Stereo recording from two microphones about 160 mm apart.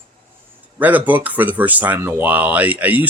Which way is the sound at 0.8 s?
10° right (ahead or behind).